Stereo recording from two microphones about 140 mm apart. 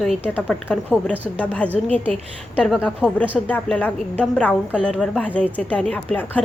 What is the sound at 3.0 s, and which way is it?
Speech, 10° right (ahead or behind).